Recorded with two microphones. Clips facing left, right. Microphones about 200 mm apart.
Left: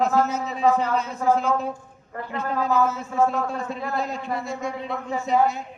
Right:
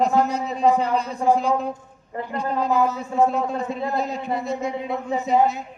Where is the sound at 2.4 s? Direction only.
15° right (ahead or behind).